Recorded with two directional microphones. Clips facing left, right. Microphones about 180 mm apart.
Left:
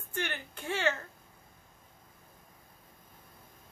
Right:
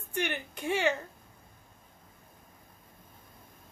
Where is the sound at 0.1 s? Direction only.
15° right (ahead or behind).